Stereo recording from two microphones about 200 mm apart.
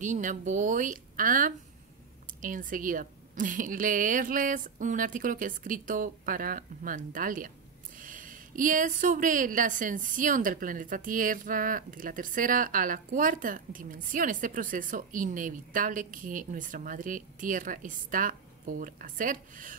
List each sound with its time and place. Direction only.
0.0 s a woman's voice: 40° right (ahead or behind)